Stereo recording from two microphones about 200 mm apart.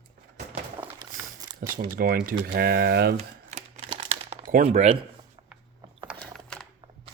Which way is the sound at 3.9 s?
30° right (ahead or behind).